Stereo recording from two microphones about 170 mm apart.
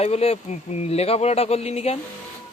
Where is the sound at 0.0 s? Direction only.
40° left (ahead or behind).